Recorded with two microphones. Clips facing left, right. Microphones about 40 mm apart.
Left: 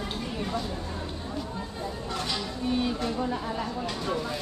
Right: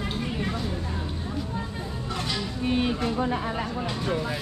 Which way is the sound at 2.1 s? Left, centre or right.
Centre.